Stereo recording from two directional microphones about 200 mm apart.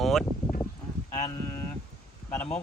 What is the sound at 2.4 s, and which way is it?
Speech, 5° left (ahead or behind).